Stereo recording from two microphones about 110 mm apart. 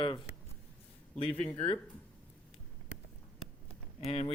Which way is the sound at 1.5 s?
65° left (ahead or behind).